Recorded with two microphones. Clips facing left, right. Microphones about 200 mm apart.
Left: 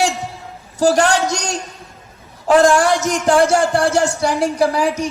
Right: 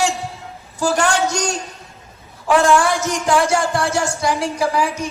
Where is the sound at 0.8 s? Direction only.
40° left (ahead or behind).